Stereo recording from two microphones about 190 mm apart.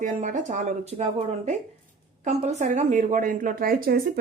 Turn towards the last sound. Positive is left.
turn(degrees=-50)  # may be behind; listen again after turning